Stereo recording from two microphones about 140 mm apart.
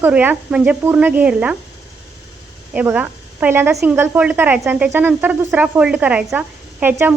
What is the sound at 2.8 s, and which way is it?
Speech, 10° right (ahead or behind).